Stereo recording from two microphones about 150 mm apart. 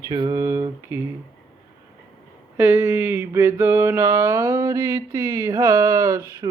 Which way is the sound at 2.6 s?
15° right (ahead or behind).